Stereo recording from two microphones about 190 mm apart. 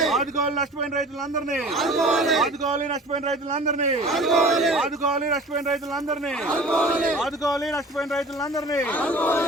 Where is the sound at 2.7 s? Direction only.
40° right (ahead or behind).